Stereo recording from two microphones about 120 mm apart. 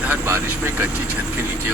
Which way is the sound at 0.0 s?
15° right (ahead or behind).